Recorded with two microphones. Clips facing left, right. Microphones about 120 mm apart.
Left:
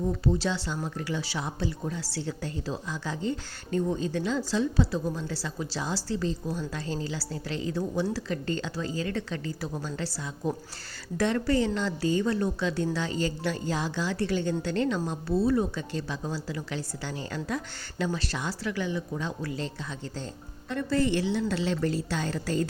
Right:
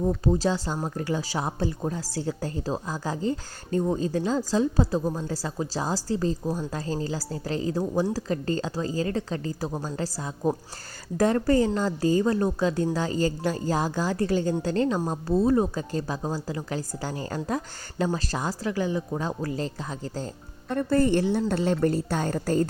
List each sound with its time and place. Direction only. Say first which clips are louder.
0.3 s a woman's voice: right 3 dB; 40° right (ahead or behind)